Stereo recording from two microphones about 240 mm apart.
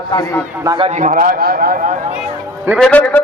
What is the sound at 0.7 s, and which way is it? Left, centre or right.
A man's voice, right.